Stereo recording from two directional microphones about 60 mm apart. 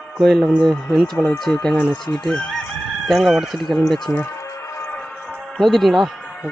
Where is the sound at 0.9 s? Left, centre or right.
Centre.